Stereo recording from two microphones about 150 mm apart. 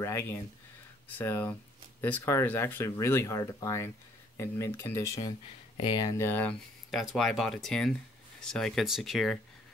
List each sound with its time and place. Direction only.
0.0 s speech: 15° left (ahead or behind)
5.8 s speech: 30° left (ahead or behind); by 6.5 s 15° left (ahead or behind)
6.9 s speech: centre (ahead or behind)